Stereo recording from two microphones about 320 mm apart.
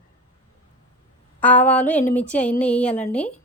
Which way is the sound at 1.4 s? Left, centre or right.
Centre.